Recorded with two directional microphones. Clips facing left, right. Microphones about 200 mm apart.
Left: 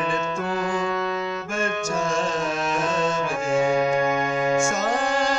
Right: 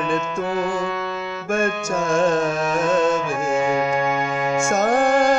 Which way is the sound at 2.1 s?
55° right (ahead or behind).